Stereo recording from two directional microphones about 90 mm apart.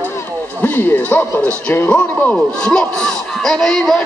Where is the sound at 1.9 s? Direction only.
10° left (ahead or behind).